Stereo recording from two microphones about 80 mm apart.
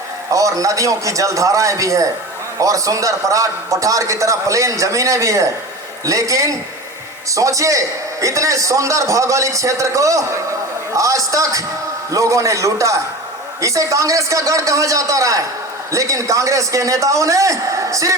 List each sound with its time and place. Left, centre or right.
0.3 s a man's voice: right